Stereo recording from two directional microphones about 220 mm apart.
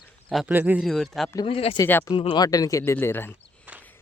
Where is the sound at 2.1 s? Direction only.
25° left (ahead or behind).